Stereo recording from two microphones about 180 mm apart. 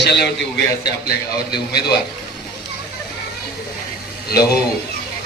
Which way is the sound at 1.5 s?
65° left (ahead or behind).